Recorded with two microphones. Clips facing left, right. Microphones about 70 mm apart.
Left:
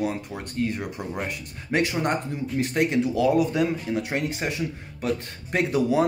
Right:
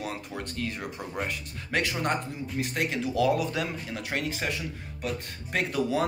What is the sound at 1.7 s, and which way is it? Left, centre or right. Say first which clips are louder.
Speech: left 4 dB; centre.